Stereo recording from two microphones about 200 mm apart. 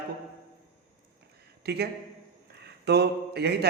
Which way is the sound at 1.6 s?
55° right (ahead or behind).